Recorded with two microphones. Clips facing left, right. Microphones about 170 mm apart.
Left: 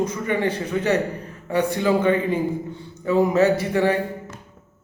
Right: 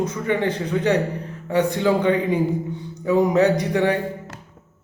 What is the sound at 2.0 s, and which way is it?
A man's voice, 15° right (ahead or behind).